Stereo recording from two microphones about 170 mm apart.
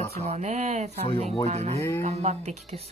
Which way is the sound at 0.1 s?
40° right (ahead or behind).